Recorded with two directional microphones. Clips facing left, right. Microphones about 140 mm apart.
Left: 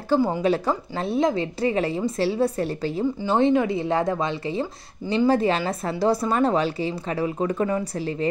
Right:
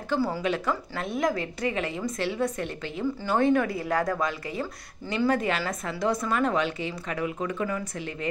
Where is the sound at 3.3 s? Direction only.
20° left (ahead or behind).